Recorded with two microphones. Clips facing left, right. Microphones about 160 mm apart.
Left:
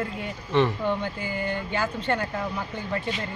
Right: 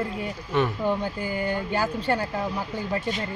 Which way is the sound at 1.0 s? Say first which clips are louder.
Right 2 dB; 40° right (ahead or behind).